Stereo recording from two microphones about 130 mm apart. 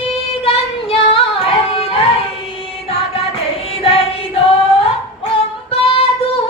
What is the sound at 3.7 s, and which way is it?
Music, 45° left (ahead or behind).